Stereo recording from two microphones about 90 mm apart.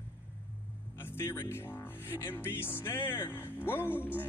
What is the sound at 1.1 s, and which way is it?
Speech, 30° left (ahead or behind).